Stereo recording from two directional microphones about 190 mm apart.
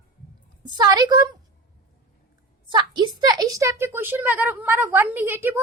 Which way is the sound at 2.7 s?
25° right (ahead or behind).